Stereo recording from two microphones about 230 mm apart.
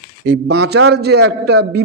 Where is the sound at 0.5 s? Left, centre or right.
Right.